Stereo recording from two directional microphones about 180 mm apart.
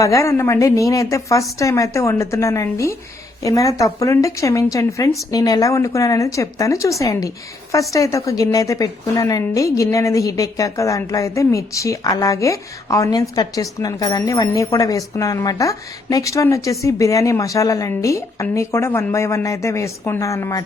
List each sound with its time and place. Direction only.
0.0 s a woman's voice: 15° left (ahead or behind)